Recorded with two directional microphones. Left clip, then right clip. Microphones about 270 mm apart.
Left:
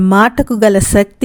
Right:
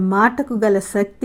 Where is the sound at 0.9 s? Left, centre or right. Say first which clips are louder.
Left 8 dB; left.